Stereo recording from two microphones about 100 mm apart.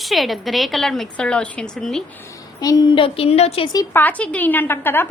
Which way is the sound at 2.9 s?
65° left (ahead or behind).